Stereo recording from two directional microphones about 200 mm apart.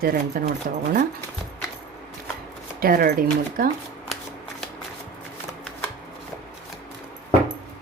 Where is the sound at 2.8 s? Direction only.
50° right (ahead or behind).